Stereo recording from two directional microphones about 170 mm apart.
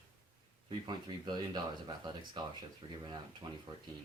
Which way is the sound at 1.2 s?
25° right (ahead or behind).